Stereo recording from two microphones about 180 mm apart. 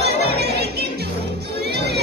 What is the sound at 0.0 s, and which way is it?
Music, 65° right (ahead or behind).